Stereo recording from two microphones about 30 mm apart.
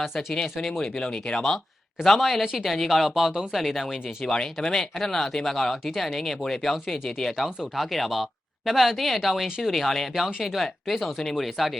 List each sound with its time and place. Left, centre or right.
0.0 s speech: centre
0.4 s speech: centre
0.9 s speech: left
2.0 s speech: centre
4.3 s speech: left
4.8 s speech: centre